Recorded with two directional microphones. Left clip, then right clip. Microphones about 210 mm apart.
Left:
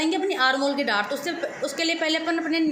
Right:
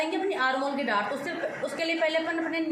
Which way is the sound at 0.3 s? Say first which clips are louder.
Left 5 dB; 55° left (ahead or behind).